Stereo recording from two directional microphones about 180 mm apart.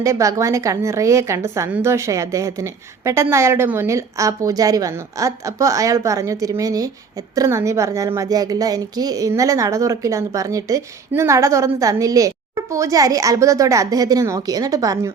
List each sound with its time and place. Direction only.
0.0 s a woman's voice: 15° right (ahead or behind)